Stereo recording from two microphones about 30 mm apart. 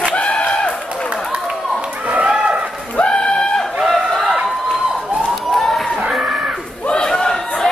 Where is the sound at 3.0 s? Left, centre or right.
Left.